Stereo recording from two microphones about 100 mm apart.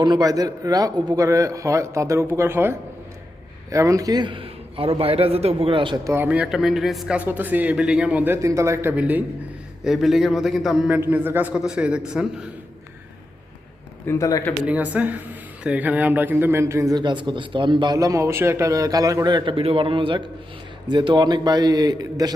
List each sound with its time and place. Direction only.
0.0 s a man's voice: 40° right (ahead or behind); by 6.0 s 60° right (ahead or behind)
6.2 s a man's voice: 10° right (ahead or behind)
7.2 s a man's voice: 15° right (ahead or behind)
9.8 s a man's voice: 5° right (ahead or behind)
10.8 s a man's voice: 15° right (ahead or behind)
11.5 s a man's voice: 5° right (ahead or behind)
14.1 s a man's voice: 35° left (ahead or behind)
14.7 s a man's voice: 15° right (ahead or behind); by 17.0 s 30° right (ahead or behind)
17.0 s a man's voice: 50° right (ahead or behind)
17.9 s a man's voice: 35° right (ahead or behind)
19.3 s a man's voice: 55° right (ahead or behind)